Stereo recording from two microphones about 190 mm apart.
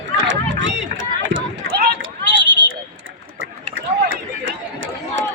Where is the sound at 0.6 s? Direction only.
75° right (ahead or behind).